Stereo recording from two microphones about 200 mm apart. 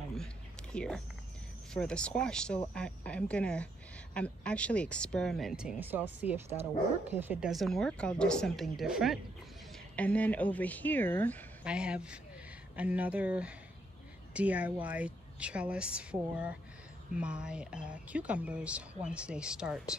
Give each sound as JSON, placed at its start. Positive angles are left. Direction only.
{"t": 0.1, "sound": "a sound", "side_deg": 5}
{"t": 1.7, "sound": "speech", "side_deg": 5}
{"t": 6.5, "sound": "speech", "side_deg": -30}
{"t": 7.2, "sound": "speech", "side_deg": -5}
{"t": 11.6, "sound": "a woman's voice", "side_deg": -5}